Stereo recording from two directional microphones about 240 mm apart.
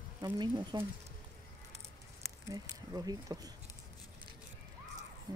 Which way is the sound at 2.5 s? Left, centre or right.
Centre.